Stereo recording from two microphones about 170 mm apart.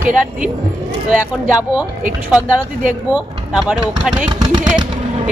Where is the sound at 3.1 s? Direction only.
5° right (ahead or behind).